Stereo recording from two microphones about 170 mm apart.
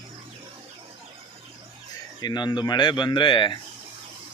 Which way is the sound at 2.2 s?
25° left (ahead or behind).